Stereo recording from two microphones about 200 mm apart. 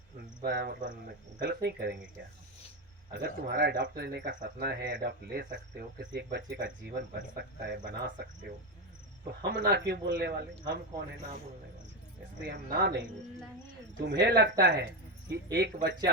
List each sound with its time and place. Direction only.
0.4 s speech: 55° right (ahead or behind)
1.4 s speech: 55° right (ahead or behind)
3.2 s speech: 55° right (ahead or behind)
12.4 s speech: 55° right (ahead or behind)
14.1 s speech: 55° right (ahead or behind)